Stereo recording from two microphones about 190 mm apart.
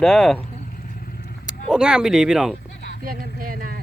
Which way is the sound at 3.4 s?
50° right (ahead or behind).